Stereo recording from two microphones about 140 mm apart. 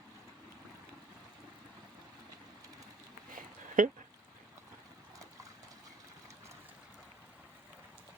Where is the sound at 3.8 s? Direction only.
70° right (ahead or behind).